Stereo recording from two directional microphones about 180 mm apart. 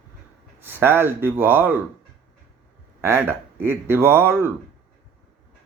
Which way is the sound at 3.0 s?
15° right (ahead or behind).